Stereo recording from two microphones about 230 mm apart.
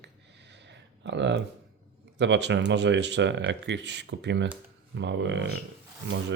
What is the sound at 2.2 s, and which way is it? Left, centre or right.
Speech, right.